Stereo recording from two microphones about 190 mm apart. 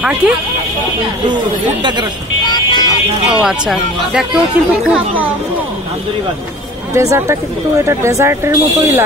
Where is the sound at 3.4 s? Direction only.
Centre (ahead or behind).